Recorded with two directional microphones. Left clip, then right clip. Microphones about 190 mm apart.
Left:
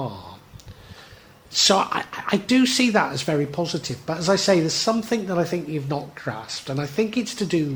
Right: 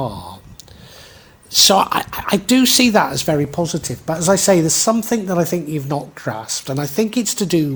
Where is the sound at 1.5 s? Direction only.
45° right (ahead or behind).